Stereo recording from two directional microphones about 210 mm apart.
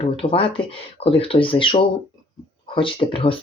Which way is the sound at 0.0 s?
25° left (ahead or behind).